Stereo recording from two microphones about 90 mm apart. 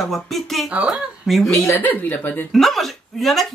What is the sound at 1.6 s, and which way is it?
Speech, 20° left (ahead or behind).